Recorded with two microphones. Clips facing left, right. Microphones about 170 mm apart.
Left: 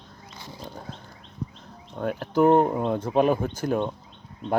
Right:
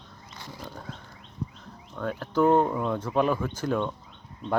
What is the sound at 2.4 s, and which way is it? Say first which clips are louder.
Speech: left 3 dB; 25° left (ahead or behind).